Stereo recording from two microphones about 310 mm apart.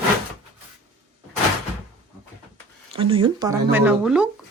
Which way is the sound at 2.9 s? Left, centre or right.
Centre.